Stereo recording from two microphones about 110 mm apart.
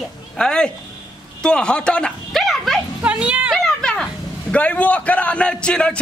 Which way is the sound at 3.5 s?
5° left (ahead or behind).